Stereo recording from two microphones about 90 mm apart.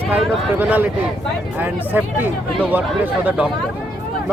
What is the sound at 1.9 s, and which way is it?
Speech, 20° right (ahead or behind).